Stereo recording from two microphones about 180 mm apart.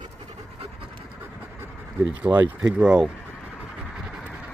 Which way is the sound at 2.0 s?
10° right (ahead or behind).